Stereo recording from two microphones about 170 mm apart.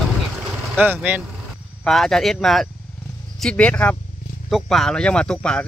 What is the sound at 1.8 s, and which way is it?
Speech, centre (ahead or behind).